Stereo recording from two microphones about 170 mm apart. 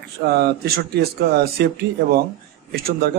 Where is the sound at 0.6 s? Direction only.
70° right (ahead or behind).